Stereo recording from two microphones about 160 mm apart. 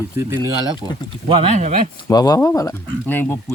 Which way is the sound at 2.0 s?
25° left (ahead or behind).